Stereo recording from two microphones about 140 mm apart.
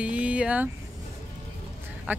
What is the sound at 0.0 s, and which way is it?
Vehicle, 10° right (ahead or behind).